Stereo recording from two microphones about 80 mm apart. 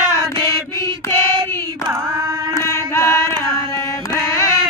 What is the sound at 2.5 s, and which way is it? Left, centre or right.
Singing, left.